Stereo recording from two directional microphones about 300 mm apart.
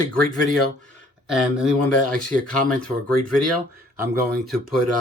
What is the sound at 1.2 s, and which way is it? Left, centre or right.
Speech, centre.